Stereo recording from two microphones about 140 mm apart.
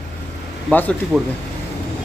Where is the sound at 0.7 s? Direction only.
10° left (ahead or behind).